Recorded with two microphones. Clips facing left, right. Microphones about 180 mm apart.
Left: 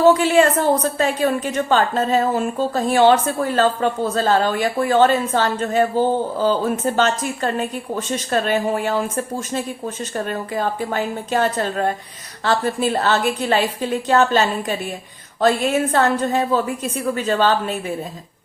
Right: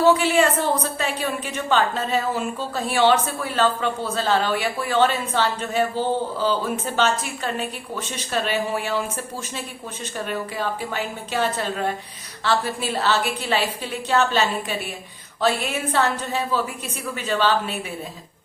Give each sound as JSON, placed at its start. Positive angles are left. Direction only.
{"t": 0.0, "sound": "a woman's voice", "side_deg": 45}